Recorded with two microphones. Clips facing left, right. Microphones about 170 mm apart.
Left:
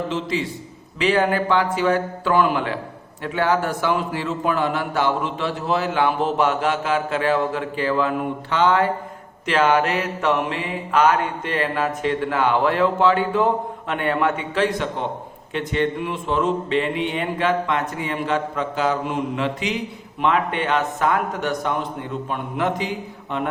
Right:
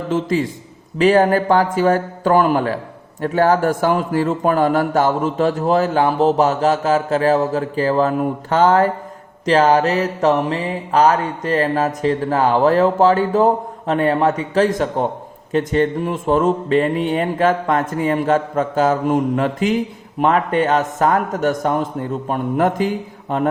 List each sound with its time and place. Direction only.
0.1 s speech: 45° right (ahead or behind)
7.5 s mantra: 40° right (ahead or behind)
15.5 s speech: 40° right (ahead or behind)